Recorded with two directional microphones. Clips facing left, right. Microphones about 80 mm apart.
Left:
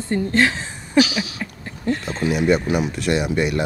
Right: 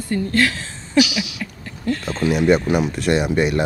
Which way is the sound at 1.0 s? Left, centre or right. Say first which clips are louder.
Even; left.